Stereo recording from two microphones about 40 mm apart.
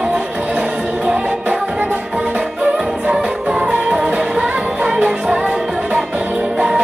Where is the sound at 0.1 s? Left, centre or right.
Right.